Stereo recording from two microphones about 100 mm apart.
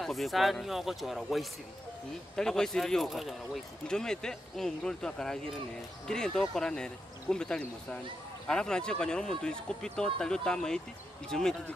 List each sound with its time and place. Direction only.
0.0 s speech: centre (ahead or behind)